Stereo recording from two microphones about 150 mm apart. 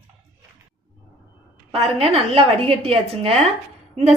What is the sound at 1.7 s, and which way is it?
A woman's voice, 40° right (ahead or behind).